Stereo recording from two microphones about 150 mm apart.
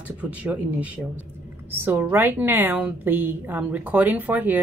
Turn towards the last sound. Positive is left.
turn(degrees=-10)  # may be behind; listen again after turning